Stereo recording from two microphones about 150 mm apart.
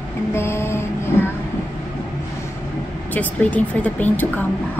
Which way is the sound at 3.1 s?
10° left (ahead or behind).